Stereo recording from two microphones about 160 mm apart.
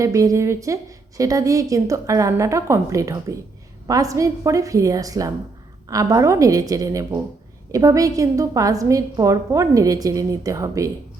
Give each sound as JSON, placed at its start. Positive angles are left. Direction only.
{"t": 0.0, "sound": "a woman's voice", "side_deg": -20}